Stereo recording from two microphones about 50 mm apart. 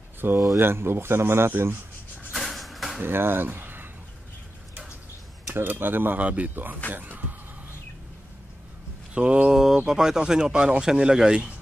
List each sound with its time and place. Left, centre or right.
0.2 s speech: right
2.3 s a sound: centre
3.0 s speech: right
5.5 s speech: right
6.1 s speech: right
6.5 s speech: right
9.1 s speech: right
9.5 s speech: centre